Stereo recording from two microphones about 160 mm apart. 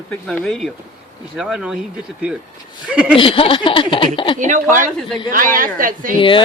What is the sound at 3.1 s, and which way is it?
Speech, 35° left (ahead or behind).